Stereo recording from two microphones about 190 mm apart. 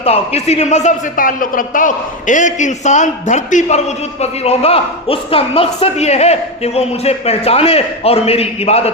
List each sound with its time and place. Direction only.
0.0 s speech: 35° left (ahead or behind)